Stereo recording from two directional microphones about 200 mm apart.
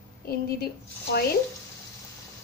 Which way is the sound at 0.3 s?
50° left (ahead or behind).